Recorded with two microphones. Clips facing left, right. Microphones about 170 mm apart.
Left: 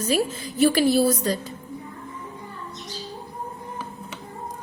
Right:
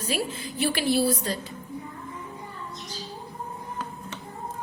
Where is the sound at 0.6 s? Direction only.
40° left (ahead or behind).